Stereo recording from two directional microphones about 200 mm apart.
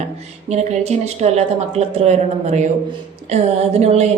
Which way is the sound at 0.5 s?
30° right (ahead or behind).